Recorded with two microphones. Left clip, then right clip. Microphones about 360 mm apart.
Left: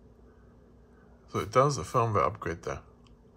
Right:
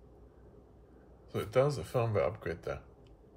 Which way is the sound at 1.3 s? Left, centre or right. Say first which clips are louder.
Left 5 dB; left.